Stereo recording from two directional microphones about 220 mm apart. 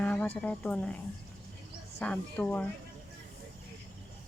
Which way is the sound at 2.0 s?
5° left (ahead or behind).